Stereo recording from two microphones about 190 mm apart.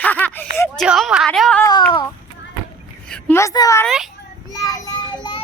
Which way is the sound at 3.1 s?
10° left (ahead or behind).